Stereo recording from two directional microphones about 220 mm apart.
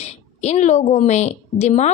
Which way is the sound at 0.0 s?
30° left (ahead or behind).